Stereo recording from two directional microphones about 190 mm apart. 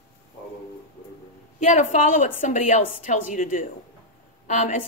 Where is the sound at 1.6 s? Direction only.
40° left (ahead or behind).